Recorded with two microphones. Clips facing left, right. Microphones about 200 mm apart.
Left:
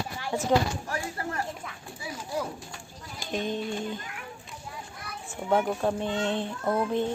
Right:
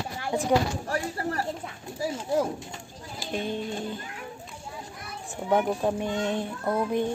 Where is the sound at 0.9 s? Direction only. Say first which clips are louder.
Right 4 dB; 35° right (ahead or behind).